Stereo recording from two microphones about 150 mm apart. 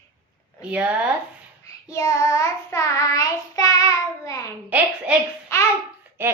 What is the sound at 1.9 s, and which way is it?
Child singing, 20° left (ahead or behind).